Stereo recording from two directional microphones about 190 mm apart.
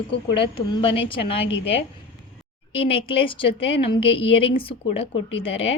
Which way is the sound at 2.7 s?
30° left (ahead or behind).